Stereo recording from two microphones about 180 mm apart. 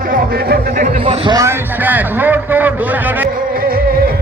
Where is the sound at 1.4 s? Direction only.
10° right (ahead or behind).